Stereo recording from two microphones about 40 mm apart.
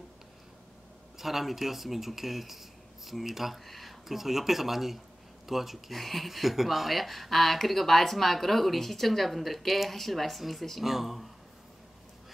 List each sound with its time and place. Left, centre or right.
1.1 s speech: centre